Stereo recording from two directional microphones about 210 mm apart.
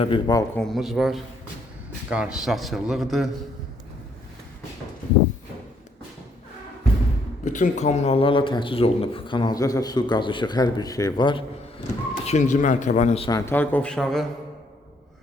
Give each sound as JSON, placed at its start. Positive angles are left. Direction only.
{"t": 0.0, "sound": "speech", "side_deg": 20}
{"t": 0.5, "sound": "speech", "side_deg": 0}
{"t": 7.4, "sound": "speech", "side_deg": 35}
{"t": 12.2, "sound": "speech", "side_deg": 35}
{"t": 13.3, "sound": "a man's voice", "side_deg": 10}